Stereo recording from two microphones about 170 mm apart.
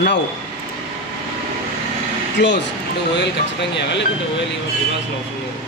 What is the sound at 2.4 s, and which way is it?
Speech, 90° left.